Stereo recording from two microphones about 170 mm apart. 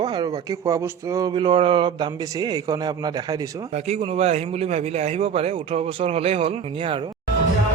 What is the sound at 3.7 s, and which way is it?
Speech, 35° right (ahead or behind).